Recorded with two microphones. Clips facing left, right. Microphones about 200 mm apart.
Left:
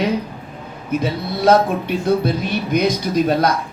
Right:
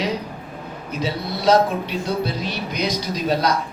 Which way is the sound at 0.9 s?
55° left (ahead or behind).